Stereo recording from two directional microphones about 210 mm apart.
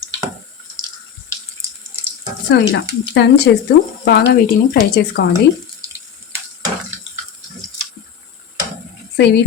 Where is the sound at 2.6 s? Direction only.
55° left (ahead or behind).